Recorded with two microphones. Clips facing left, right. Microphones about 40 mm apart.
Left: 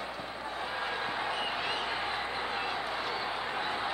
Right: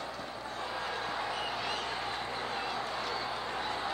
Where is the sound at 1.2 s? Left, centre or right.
Centre.